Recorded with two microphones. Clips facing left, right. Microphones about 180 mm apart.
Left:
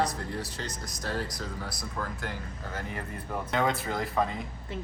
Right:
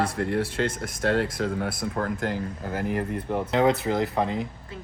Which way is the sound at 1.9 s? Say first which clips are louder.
Right 7 dB; 50° right (ahead or behind).